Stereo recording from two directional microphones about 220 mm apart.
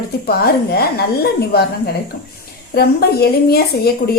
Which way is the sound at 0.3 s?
45° left (ahead or behind).